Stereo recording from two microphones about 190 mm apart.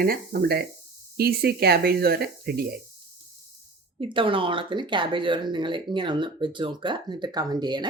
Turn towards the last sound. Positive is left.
turn(degrees=-20)  # may be behind; listen again after turning